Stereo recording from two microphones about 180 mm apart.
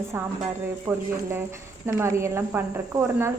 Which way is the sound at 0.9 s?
10° right (ahead or behind).